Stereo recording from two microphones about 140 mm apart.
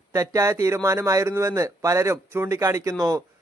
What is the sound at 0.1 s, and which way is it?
Speech, 25° right (ahead or behind).